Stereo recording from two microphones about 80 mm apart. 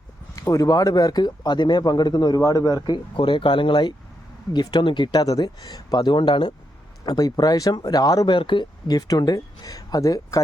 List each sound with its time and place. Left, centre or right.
0.3 s speech: left
2.4 s speech: left
4.5 s speech: left
5.2 s speech: left
7.0 s speech: left
8.3 s speech: left
9.0 s speech: left